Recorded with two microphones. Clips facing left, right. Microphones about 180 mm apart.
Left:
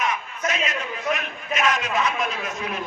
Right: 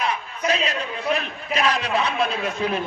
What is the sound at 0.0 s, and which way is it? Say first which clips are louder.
A man's voice: right 1 dB; 35° right (ahead or behind).